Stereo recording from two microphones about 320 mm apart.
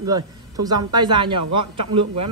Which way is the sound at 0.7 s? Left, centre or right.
Centre.